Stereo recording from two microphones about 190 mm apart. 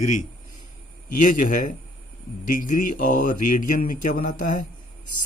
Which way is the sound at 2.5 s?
45° left (ahead or behind).